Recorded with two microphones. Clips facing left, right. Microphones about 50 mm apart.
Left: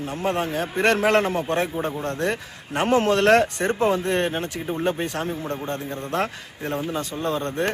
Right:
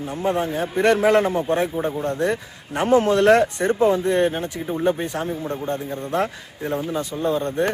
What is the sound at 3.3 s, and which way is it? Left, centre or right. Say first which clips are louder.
Speech: right 1 dB; left.